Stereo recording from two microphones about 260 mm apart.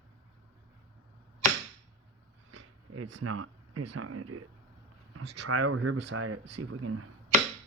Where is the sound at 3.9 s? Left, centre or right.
Right.